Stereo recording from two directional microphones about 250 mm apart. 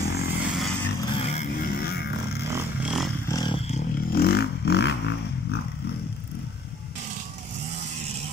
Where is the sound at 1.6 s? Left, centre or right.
Left.